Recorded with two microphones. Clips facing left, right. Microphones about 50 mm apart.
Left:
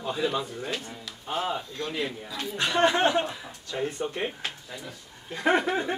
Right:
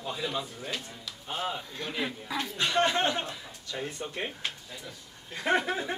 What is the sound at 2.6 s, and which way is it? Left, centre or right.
Speech, centre.